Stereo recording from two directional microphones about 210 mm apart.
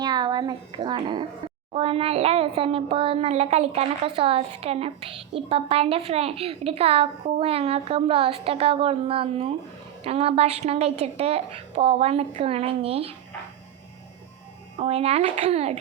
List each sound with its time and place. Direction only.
0.0 s speech: 20° right (ahead or behind)
14.8 s speech: 30° right (ahead or behind)